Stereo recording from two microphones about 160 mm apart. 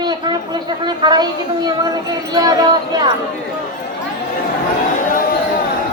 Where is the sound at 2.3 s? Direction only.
25° right (ahead or behind).